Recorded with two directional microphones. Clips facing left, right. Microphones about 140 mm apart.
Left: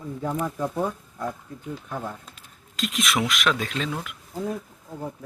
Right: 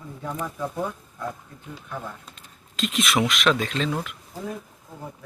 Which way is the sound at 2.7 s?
Centre (ahead or behind).